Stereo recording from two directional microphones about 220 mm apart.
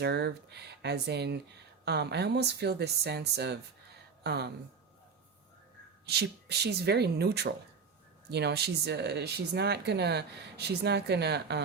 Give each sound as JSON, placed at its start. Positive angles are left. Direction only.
{"t": 0.0, "sound": "speech", "side_deg": -50}
{"t": 6.1, "sound": "speech", "side_deg": -50}